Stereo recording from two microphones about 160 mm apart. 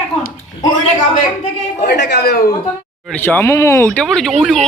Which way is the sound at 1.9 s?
90° left.